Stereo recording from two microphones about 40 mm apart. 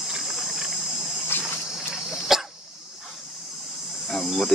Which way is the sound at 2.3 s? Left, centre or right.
Centre.